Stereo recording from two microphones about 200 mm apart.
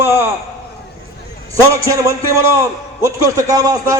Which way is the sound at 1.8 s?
15° right (ahead or behind).